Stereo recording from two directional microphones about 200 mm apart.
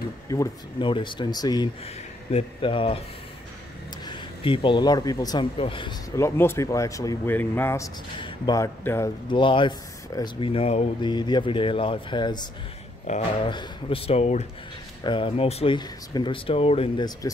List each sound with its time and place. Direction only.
0.3 s speech: 20° left (ahead or behind)
4.0 s speech: 25° left (ahead or behind)
9.3 s speech: 25° left (ahead or behind)
13.1 s speech: 35° left (ahead or behind)